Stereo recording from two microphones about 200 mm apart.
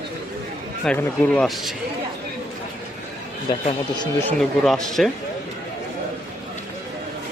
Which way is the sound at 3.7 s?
20° left (ahead or behind).